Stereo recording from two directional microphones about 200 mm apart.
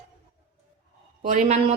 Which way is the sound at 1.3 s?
40° right (ahead or behind).